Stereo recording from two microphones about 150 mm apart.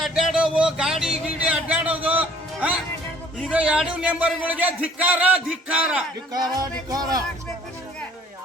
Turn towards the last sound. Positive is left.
turn(degrees=-25)  # may be behind; listen again after turning